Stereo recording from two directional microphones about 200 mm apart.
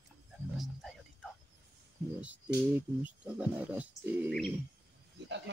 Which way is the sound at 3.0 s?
5° right (ahead or behind).